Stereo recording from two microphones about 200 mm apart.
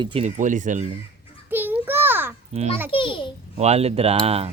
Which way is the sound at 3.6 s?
30° right (ahead or behind).